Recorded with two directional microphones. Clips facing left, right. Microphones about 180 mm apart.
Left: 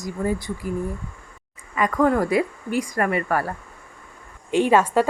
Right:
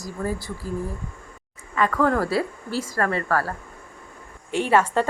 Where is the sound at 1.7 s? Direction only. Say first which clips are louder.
Left 2 dB; 15° left (ahead or behind).